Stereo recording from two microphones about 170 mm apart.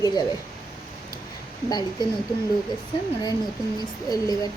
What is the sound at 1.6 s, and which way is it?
Speech, 25° left (ahead or behind).